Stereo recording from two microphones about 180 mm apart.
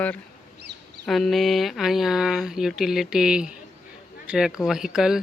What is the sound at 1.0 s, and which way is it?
Speech, centre (ahead or behind).